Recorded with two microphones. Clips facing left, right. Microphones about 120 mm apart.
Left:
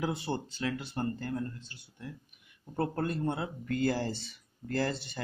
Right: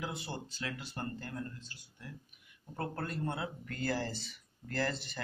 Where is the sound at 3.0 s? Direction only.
20° left (ahead or behind).